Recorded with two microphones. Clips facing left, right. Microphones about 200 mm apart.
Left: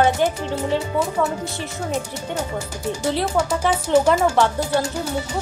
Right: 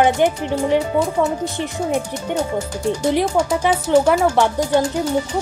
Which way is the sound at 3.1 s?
15° right (ahead or behind).